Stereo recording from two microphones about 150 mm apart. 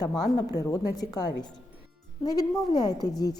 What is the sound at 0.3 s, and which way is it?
A woman's voice, 25° left (ahead or behind).